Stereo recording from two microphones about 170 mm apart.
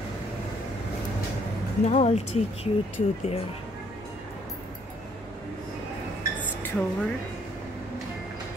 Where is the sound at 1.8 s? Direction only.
40° left (ahead or behind).